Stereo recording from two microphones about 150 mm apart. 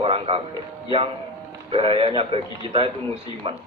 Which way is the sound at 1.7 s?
35° right (ahead or behind).